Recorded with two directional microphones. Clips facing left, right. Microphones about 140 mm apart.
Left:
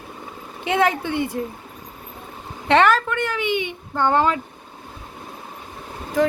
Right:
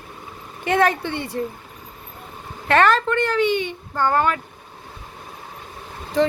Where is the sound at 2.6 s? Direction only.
20° left (ahead or behind).